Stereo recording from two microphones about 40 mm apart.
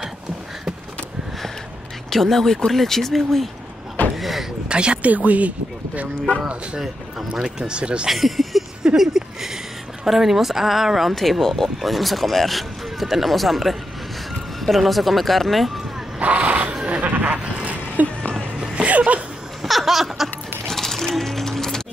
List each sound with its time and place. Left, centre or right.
2.0 s speech: centre
4.2 s a sound: centre
4.6 s speech: right
5.0 s speech: right
7.4 s speech: right
8.1 s speech: centre
8.9 s a sound: centre
10.0 s speech: centre
16.2 s a sound: right
17.0 s sheep: right
17.6 s a sound: right
18.8 s music: right
19.6 s laughter: centre
20.6 s music: centre